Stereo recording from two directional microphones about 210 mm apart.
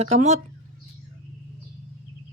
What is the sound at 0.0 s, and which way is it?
Speech, 30° right (ahead or behind).